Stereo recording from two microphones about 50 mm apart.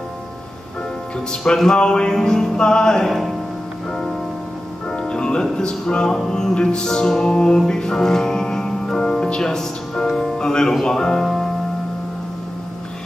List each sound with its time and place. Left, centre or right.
1.3 s music: centre
4.8 s music: centre